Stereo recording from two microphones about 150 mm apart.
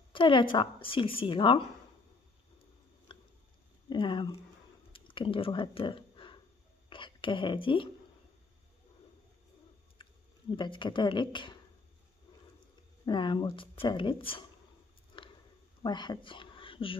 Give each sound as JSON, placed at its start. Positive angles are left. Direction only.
{"t": 0.1, "sound": "a woman's voice", "side_deg": 35}
{"t": 3.1, "sound": "a sound", "side_deg": 35}
{"t": 3.9, "sound": "a woman's voice", "side_deg": 30}
{"t": 4.9, "sound": "a sound", "side_deg": 35}
{"t": 6.9, "sound": "a woman's voice", "side_deg": 35}
{"t": 10.0, "sound": "chewing", "side_deg": 35}
{"t": 10.5, "sound": "a woman's voice", "side_deg": 35}
{"t": 13.0, "sound": "a woman's voice", "side_deg": 30}
{"t": 15.8, "sound": "speech", "side_deg": 30}